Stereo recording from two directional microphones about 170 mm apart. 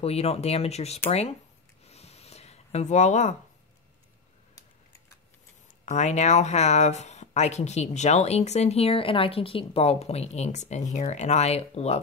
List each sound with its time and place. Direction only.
0.0 s speech: 35° left (ahead or behind)
1.9 s a sound: 40° left (ahead or behind)
5.9 s speech: 45° left (ahead or behind)